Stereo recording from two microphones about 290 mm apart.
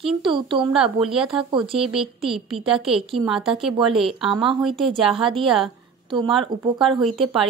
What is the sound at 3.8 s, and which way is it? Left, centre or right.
Speech, centre.